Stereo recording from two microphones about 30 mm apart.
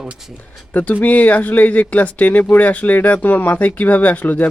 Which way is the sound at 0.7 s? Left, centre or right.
Left.